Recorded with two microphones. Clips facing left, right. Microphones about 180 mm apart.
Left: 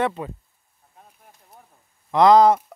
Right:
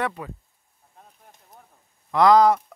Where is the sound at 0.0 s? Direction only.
25° left (ahead or behind).